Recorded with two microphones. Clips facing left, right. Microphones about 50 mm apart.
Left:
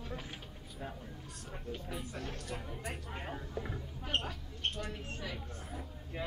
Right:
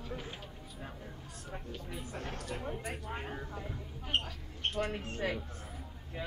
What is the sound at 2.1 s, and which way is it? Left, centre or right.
Speech, right.